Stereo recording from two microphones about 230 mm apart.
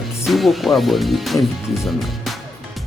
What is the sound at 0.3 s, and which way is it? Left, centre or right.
Speech, centre.